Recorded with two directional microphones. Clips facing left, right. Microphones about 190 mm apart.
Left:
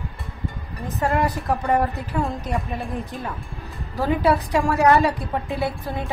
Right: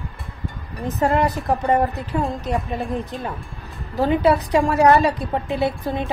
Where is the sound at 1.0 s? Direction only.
25° right (ahead or behind).